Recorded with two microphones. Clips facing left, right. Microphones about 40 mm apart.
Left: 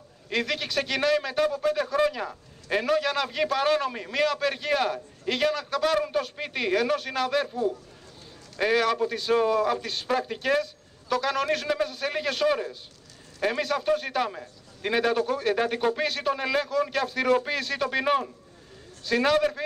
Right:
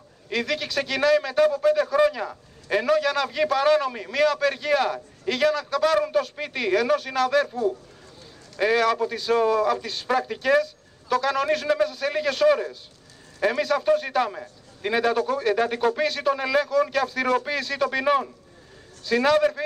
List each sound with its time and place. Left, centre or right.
0.3 s a man's voice: centre
8.5 s a man's voice: centre